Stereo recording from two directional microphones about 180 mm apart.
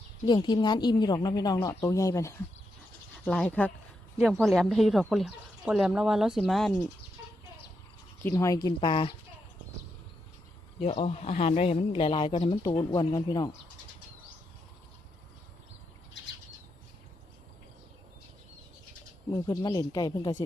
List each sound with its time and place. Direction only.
0.3 s speech: 25° left (ahead or behind)
3.2 s speech: 5° left (ahead or behind)
8.2 s a woman's voice: 15° left (ahead or behind)
8.6 s speech: 25° left (ahead or behind)
10.8 s speech: 35° left (ahead or behind); by 13.5 s 20° left (ahead or behind)
19.3 s speech: 20° left (ahead or behind)